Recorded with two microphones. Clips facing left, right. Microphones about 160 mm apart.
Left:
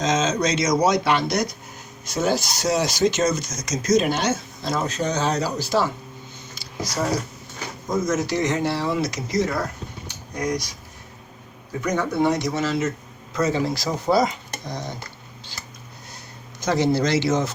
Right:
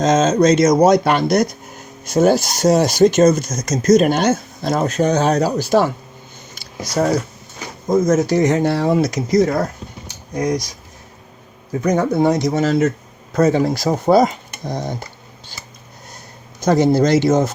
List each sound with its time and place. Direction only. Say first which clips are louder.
0.0 s speech: right 8 dB; 50° right (ahead or behind)
6.5 s a sound: right 5 dB; 60° right (ahead or behind)
7.9 s speech: right 8 dB; 50° right (ahead or behind)
11.8 s speech: right 6 dB; 40° right (ahead or behind)
13.3 s speech: right 7 dB; 55° right (ahead or behind)
16.6 s speech: right 7 dB; 50° right (ahead or behind)